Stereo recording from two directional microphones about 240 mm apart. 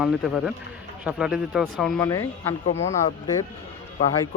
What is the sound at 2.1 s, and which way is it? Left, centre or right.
Speech, centre.